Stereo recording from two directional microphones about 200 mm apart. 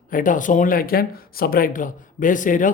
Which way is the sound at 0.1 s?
40° left (ahead or behind).